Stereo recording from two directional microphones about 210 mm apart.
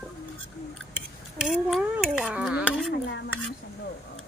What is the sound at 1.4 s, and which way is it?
Dishes, 5° right (ahead or behind).